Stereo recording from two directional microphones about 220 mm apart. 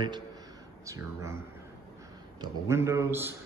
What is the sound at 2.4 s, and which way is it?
Speech, 10° right (ahead or behind).